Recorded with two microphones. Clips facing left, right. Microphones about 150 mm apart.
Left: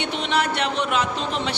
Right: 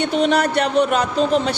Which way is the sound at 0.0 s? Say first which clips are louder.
Right 7 dB; 40° right (ahead or behind).